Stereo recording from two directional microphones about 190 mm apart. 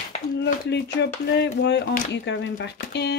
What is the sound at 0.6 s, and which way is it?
Speech, 65° left (ahead or behind).